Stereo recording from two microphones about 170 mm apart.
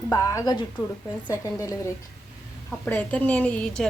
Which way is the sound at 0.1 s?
20° left (ahead or behind).